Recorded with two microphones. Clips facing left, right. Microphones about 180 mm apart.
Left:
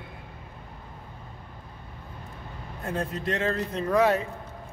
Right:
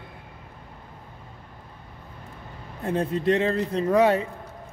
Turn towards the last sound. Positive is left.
turn(degrees=-30)  # may be behind; listen again after turning